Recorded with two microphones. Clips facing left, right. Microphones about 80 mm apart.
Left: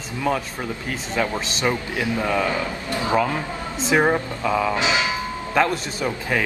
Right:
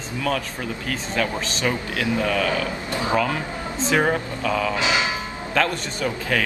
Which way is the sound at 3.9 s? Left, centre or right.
Centre.